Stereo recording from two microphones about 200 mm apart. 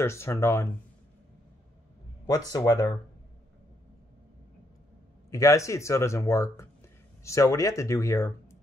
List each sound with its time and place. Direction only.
0.0 s speech: 15° left (ahead or behind)
2.5 s speech: 20° left (ahead or behind)
5.3 s speech: 15° left (ahead or behind)